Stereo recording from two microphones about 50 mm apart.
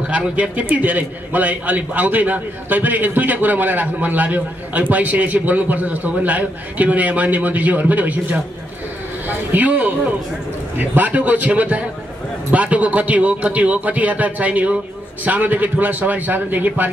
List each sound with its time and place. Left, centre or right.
0.0 s a man's voice: right
9.5 s a man's voice: right